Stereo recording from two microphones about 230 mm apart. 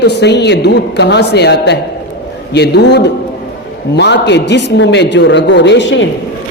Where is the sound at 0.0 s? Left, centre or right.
Left.